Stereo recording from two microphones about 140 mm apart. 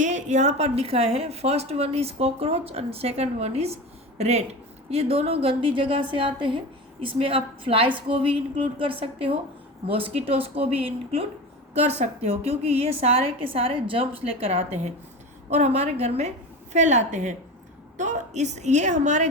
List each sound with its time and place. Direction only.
0.0 s a woman's voice: 60° right (ahead or behind)